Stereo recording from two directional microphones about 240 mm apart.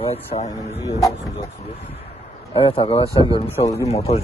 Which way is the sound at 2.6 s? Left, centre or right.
Left.